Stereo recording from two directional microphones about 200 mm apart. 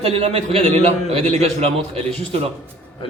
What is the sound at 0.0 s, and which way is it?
A man's voice, 30° right (ahead or behind).